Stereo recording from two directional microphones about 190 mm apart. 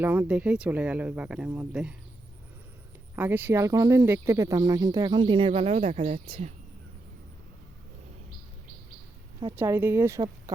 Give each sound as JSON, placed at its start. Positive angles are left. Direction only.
{"t": 0.0, "sound": "speech", "side_deg": -10}
{"t": 3.2, "sound": "speech", "side_deg": -10}
{"t": 9.6, "sound": "speech", "side_deg": -10}